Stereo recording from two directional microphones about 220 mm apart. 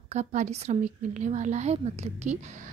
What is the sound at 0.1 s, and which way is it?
A woman's voice, 30° right (ahead or behind).